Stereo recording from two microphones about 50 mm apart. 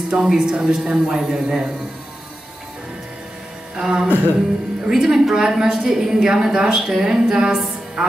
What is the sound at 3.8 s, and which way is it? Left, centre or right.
A woman's voice, centre.